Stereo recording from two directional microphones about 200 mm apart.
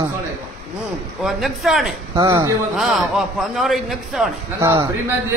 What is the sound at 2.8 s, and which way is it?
A man's voice, centre (ahead or behind).